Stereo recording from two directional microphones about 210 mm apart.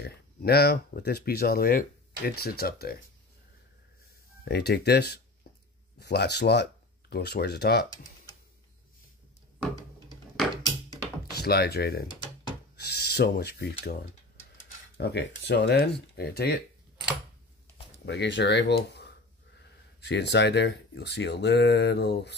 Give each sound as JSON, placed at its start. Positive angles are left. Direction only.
{"t": 0.0, "sound": "speech", "side_deg": 50}
{"t": 4.5, "sound": "speech", "side_deg": 50}
{"t": 11.3, "sound": "speech", "side_deg": 50}
{"t": 12.7, "sound": "filing", "side_deg": 50}
{"t": 14.6, "sound": "speech", "side_deg": 55}
{"t": 18.0, "sound": "speech", "side_deg": 55}
{"t": 20.0, "sound": "speech", "side_deg": 55}